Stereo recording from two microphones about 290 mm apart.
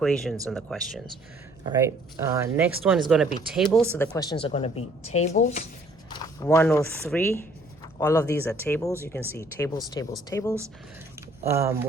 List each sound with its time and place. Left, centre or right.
0.0 s speech: centre
1.7 s speech: centre
3.9 s speech: centre
6.1 s speech: centre
11.4 s speech: centre